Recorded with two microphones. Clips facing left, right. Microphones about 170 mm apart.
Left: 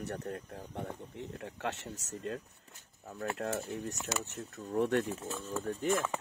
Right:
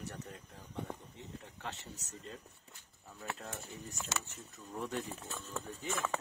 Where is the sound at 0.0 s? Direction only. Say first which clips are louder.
Left 8 dB; 60° left (ahead or behind).